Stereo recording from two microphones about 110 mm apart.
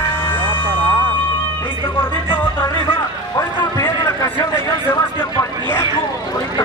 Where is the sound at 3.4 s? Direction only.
25° left (ahead or behind).